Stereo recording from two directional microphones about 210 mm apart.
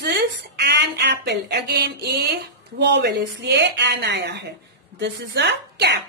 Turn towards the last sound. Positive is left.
turn(degrees=-55)  # may be behind; listen again after turning